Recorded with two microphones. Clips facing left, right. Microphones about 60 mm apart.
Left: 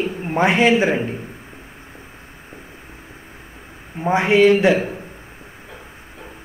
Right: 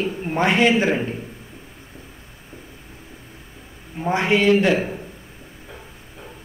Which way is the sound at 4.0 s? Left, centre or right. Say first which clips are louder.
Left 5 dB; centre.